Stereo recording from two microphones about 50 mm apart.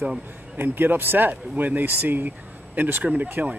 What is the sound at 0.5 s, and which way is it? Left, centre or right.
Speech, right.